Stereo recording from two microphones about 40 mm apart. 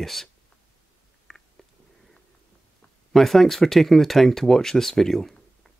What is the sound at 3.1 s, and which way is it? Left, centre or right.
Speech, centre.